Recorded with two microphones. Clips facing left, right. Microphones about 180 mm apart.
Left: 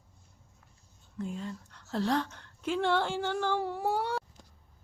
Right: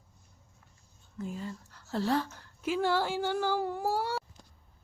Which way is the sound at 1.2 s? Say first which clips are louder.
Left 1 dB; centre (ahead or behind).